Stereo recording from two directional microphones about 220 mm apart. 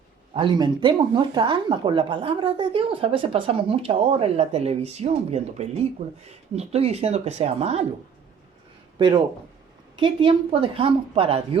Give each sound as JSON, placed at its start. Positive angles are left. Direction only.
{"t": 0.3, "sound": "speech", "side_deg": -20}
{"t": 9.0, "sound": "speech", "side_deg": -20}